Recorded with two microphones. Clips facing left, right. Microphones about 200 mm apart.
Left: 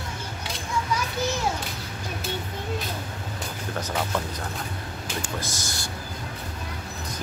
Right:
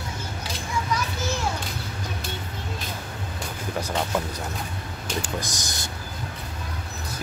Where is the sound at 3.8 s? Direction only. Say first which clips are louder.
Right 2 dB; 10° right (ahead or behind).